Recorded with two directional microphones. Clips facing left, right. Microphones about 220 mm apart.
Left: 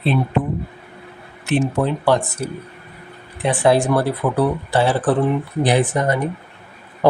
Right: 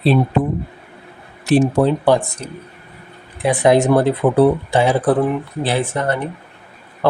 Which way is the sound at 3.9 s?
25° right (ahead or behind).